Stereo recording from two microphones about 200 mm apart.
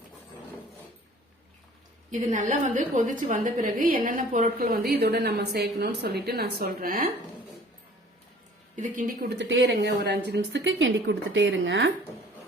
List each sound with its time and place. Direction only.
2.3 s a woman's voice: 40° right (ahead or behind)
8.7 s a woman's voice: 40° right (ahead or behind)
9.4 s a woman's voice: 70° right (ahead or behind)